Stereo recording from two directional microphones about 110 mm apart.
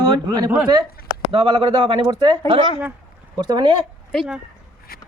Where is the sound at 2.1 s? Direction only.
40° right (ahead or behind).